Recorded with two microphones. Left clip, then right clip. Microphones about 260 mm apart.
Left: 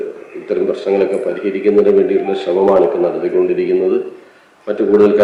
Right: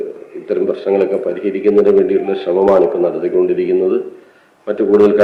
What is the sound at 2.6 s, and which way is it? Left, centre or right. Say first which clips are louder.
Speech: even; right.